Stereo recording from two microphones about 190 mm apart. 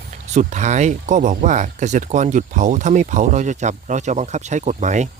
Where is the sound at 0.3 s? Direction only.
40° right (ahead or behind).